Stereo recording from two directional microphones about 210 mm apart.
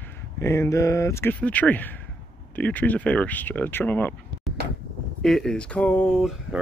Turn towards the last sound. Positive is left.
turn(degrees=0)  # may be behind; listen again after turning